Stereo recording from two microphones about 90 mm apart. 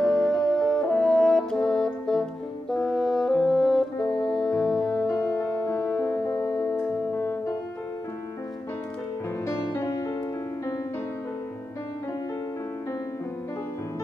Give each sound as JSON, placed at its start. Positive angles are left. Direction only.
{"t": 0.0, "sound": "french horn", "side_deg": 5}
{"t": 2.7, "sound": "music", "side_deg": 5}
{"t": 6.3, "sound": "music", "side_deg": 30}
{"t": 9.5, "sound": "music", "side_deg": 35}